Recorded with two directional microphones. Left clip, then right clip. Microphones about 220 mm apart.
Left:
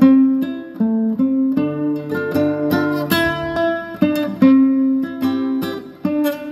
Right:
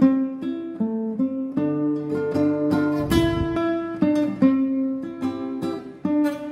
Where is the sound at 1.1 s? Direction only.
45° left (ahead or behind).